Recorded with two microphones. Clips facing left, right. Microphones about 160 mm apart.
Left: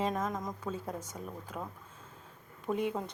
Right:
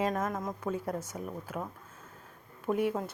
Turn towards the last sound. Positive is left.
turn(degrees=-5)  # may be behind; listen again after turning